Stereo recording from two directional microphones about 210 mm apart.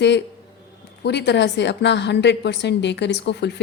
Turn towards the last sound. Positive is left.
turn(degrees=55)  # may be behind; listen again after turning